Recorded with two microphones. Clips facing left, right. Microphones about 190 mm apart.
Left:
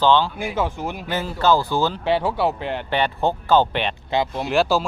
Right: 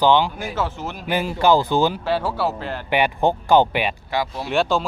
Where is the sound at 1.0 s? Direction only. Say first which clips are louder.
Right 2 dB; 15° right (ahead or behind).